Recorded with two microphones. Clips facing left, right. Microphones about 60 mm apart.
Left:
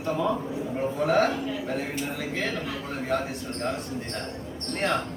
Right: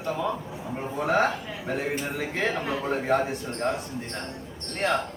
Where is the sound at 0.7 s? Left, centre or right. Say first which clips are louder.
Left 1 dB; centre; by 3.2 s right.